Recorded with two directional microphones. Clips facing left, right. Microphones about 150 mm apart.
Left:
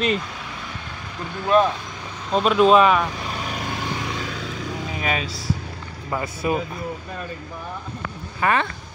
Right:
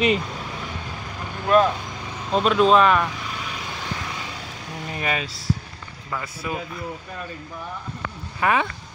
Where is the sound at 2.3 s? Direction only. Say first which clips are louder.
Left 2 dB; 5° left (ahead or behind).